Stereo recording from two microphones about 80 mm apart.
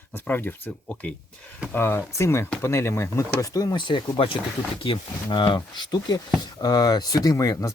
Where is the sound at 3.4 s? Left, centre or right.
Left.